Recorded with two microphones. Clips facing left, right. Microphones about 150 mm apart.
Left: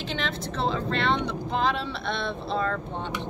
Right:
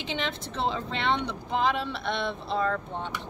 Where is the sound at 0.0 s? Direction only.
20° right (ahead or behind).